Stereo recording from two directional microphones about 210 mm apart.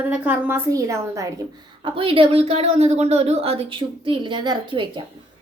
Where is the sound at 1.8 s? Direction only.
25° right (ahead or behind).